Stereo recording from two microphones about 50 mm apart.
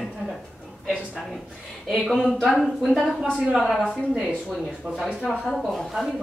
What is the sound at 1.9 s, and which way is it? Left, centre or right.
A woman's voice, centre.